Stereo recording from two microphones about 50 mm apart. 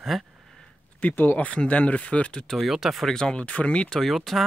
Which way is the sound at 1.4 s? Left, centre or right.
Left.